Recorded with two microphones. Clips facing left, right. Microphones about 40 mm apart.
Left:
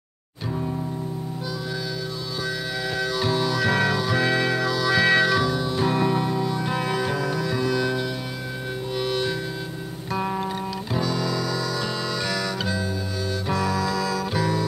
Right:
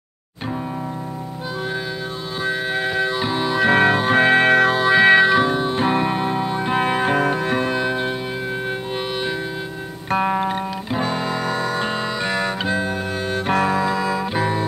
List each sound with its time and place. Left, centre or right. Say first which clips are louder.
2.4 s harmonica: right 8 dB; right
10.1 s music: right 7 dB; right